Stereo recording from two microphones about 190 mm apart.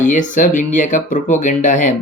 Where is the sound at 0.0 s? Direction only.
40° left (ahead or behind).